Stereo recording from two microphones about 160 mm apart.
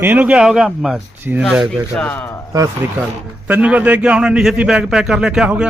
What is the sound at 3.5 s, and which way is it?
A man's voice, 10° right (ahead or behind).